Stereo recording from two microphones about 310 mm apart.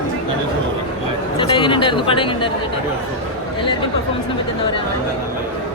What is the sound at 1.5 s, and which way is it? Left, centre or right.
Speech, centre.